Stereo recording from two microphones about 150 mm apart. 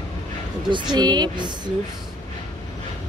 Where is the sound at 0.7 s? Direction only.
30° right (ahead or behind).